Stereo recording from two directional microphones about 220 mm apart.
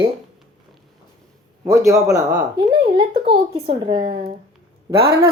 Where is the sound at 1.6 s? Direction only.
15° right (ahead or behind).